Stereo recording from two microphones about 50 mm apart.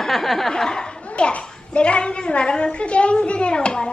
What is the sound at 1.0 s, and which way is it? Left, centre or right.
A child's voice, left.